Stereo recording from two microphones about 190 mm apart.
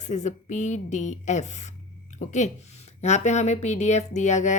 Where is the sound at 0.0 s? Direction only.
40° left (ahead or behind).